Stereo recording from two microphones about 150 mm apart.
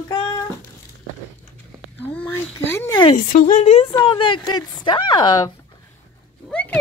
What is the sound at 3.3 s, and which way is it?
Speech, 60° left (ahead or behind).